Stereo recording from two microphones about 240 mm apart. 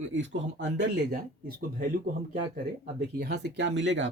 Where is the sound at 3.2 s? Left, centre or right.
Right.